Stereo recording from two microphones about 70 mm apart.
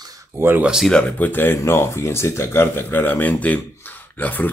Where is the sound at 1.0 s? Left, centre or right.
Left.